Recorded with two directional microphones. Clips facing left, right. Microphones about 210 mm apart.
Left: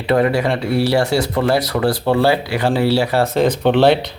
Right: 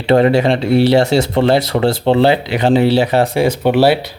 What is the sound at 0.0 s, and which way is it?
Speech, 25° right (ahead or behind).